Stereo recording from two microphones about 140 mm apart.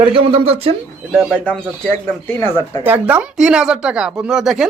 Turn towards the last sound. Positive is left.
turn(degrees=-5)  # may be behind; listen again after turning